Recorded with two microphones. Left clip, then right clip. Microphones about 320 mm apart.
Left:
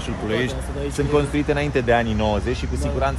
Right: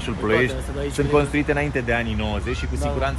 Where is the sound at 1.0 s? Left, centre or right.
Centre.